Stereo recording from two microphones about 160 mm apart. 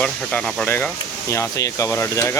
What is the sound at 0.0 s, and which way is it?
Speech, 5° left (ahead or behind).